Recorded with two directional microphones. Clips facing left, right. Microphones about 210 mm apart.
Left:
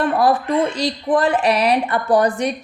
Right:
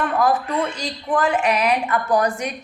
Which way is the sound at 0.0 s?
35° left (ahead or behind).